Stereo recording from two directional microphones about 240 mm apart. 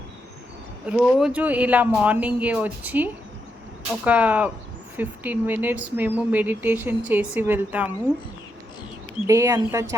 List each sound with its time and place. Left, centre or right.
0.9 s speech: centre
9.2 s speech: centre